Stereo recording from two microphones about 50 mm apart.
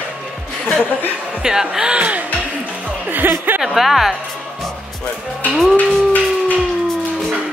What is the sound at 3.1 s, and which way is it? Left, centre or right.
Speech, right.